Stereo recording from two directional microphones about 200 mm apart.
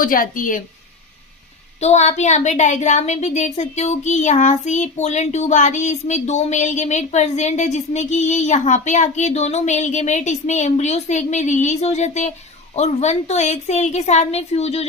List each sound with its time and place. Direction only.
0.0 s a woman's voice: 45° left (ahead or behind)
1.8 s speech: 35° left (ahead or behind)